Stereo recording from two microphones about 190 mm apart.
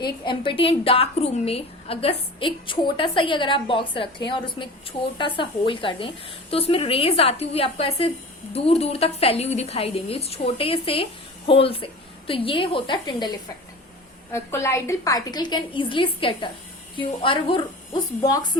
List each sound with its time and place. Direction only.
0.0 s a woman's voice: 25° left (ahead or behind)